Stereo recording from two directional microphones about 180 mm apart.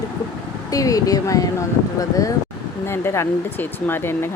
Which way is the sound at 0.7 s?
20° left (ahead or behind).